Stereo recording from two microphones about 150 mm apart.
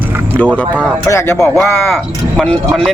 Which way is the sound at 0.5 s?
10° left (ahead or behind).